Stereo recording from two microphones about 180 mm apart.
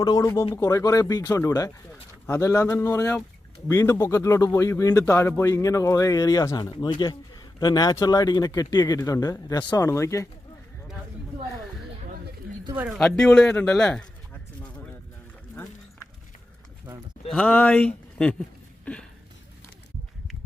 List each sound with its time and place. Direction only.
0.0 s speech: 20° left (ahead or behind)
12.7 s speech: 10° right (ahead or behind)
13.0 s a man's voice: 5° left (ahead or behind)
17.3 s speech: 5° left (ahead or behind)